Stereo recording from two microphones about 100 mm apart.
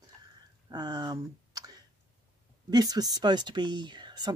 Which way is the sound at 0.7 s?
45° right (ahead or behind).